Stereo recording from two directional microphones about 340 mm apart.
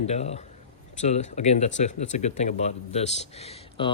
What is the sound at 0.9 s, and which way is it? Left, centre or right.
Speech, centre.